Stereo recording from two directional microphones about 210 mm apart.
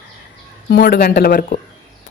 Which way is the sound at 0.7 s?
45° left (ahead or behind).